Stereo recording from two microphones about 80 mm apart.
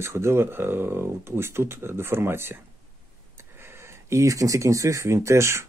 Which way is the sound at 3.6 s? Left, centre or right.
Right.